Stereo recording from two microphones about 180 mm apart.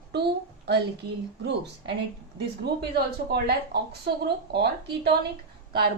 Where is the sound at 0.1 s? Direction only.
65° right (ahead or behind).